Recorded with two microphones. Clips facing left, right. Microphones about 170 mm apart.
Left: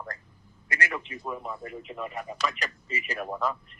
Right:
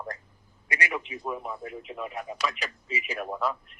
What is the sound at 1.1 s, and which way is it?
A man's voice, 5° right (ahead or behind).